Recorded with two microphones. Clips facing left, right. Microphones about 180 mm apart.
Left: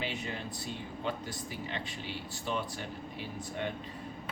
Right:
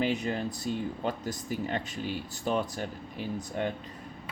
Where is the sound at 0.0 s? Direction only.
45° right (ahead or behind).